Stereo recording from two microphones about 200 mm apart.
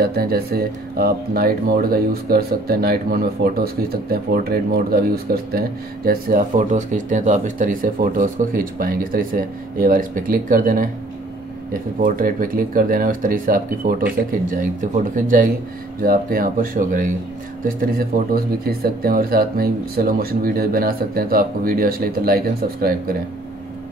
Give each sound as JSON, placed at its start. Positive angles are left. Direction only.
{"t": 0.0, "sound": "speech", "side_deg": -50}